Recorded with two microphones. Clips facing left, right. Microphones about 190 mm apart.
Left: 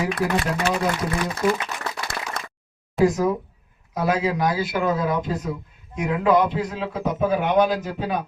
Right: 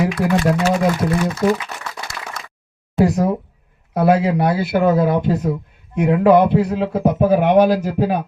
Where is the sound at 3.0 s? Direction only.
65° right (ahead or behind).